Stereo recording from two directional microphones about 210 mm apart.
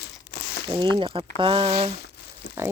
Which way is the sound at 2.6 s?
10° right (ahead or behind).